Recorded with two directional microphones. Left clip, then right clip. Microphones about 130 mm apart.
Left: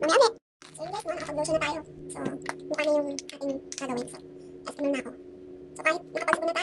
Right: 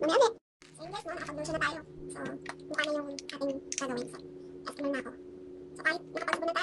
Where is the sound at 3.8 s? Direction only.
15° right (ahead or behind).